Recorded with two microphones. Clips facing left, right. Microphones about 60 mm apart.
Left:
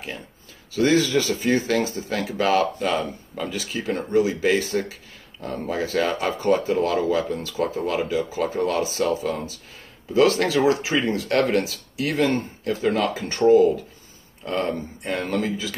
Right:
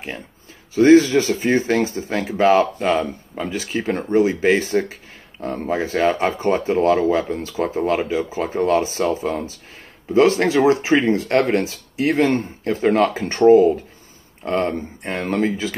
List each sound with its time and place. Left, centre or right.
0.7 s speech: right
14.4 s speech: right